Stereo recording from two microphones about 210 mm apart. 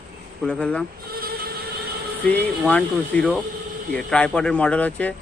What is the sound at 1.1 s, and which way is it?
Music, 45° right (ahead or behind).